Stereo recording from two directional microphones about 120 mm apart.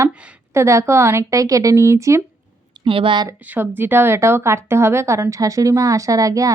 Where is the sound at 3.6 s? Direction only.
15° right (ahead or behind).